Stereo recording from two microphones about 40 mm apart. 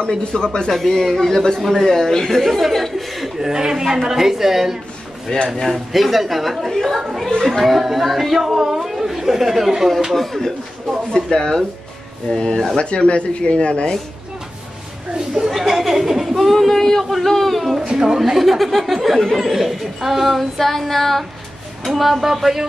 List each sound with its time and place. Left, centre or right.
0.1 s speech: centre
1.6 s speech: centre
1.9 s speech: centre
3.3 s speech: centre
10.1 s speech: centre
12.3 s speech: centre
15.1 s speech: centre
15.5 s speech: centre
17.9 s speech: centre